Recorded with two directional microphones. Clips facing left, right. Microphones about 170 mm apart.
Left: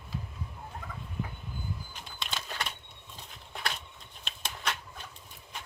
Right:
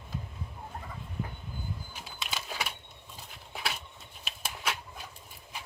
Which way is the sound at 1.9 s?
5° right (ahead or behind).